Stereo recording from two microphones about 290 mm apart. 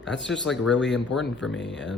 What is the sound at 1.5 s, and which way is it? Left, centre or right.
Speech, left.